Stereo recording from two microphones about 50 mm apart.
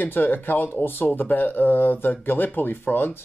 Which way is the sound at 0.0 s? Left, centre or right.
Left.